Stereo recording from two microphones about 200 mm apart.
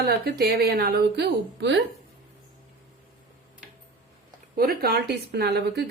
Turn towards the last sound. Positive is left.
turn(degrees=-55)  # may be behind; listen again after turning